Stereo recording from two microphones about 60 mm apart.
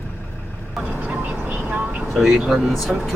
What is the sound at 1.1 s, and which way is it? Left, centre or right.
Speech, right.